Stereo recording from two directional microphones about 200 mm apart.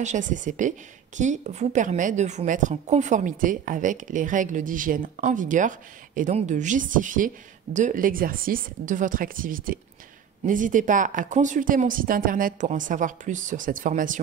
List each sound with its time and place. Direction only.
0.0 s a woman's voice: 40° right (ahead or behind)